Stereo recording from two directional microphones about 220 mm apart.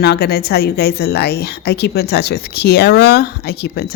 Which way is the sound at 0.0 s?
45° left (ahead or behind).